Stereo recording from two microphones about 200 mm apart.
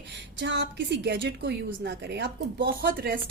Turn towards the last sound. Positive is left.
turn(degrees=-45)  # may be behind; listen again after turning